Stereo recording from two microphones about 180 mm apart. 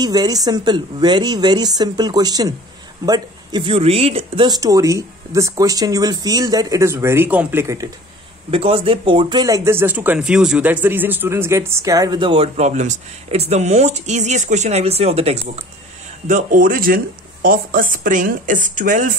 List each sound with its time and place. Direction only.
0.0 s speech: 20° right (ahead or behind)
4.5 s speech: 20° right (ahead or behind)
8.5 s speech: 30° right (ahead or behind)
16.3 s speech: 45° right (ahead or behind)